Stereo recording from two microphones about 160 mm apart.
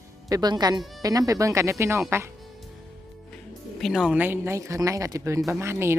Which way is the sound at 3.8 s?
Centre (ahead or behind).